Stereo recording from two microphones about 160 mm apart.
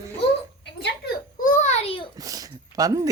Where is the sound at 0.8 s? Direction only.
90° left.